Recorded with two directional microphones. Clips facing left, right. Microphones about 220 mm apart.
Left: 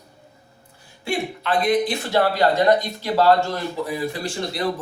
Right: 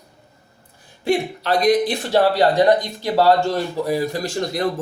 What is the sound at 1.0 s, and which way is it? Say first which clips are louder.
Speech: right 5 dB; 40° right (ahead or behind).